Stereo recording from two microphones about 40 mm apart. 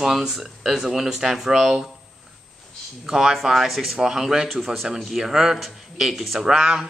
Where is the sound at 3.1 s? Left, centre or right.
Centre.